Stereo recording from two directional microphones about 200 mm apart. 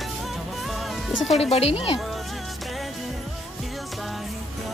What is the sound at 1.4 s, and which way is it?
Speech, 30° left (ahead or behind).